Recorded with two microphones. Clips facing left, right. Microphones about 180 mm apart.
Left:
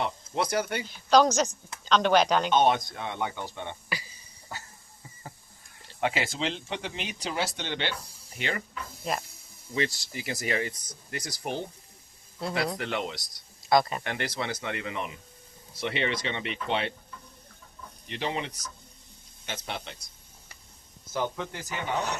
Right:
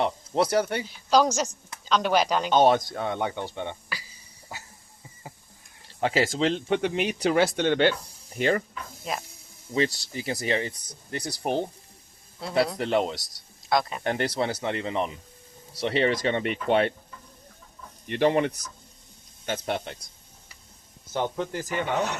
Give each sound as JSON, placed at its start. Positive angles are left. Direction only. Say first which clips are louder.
{"t": 0.0, "sound": "speech", "louder": "right 5 dB", "side_deg": -35}
{"t": 0.9, "sound": "a woman's voice", "louder": "left 5 dB", "side_deg": -5}
{"t": 2.5, "sound": "speech", "louder": "right 3 dB", "side_deg": -40}
{"t": 6.0, "sound": "speech", "louder": "right 5 dB", "side_deg": -35}
{"t": 9.1, "sound": "a woman's voice", "louder": "left 1 dB", "side_deg": 0}
{"t": 9.7, "sound": "speech", "louder": "right 4 dB", "side_deg": -35}
{"t": 13.7, "sound": "speech", "louder": "left 2 dB", "side_deg": 0}
{"t": 14.0, "sound": "speech", "louder": "right 6 dB", "side_deg": -40}
{"t": 18.1, "sound": "speech", "louder": "right 10 dB", "side_deg": -55}
{"t": 21.1, "sound": "speech", "louder": "right 3 dB", "side_deg": -35}